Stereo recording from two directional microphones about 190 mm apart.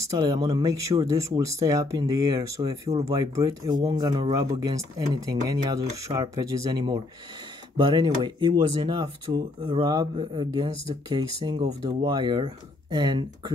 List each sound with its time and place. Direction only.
0.2 s speech: 20° right (ahead or behind)